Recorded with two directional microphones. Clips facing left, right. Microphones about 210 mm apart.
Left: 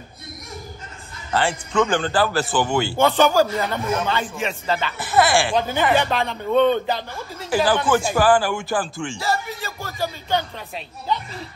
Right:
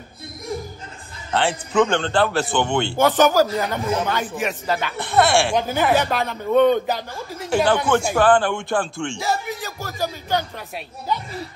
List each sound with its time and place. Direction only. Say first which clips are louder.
1.3 s a man's voice: right 1 dB; centre (ahead or behind)
3.0 s speech: right 1 dB; 10° right (ahead or behind)
4.9 s a man's voice: right 1 dB; 5° left (ahead or behind)
7.4 s a man's voice: right 1 dB; 5° left (ahead or behind)
9.2 s speech: even; 15° right (ahead or behind)